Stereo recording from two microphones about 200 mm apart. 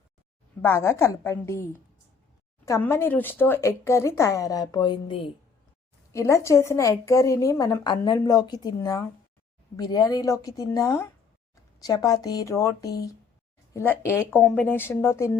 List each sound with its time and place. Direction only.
0.6 s a woman's voice: 10° left (ahead or behind)
2.6 s a woman's voice: 15° left (ahead or behind)
6.1 s a woman's voice: 15° left (ahead or behind)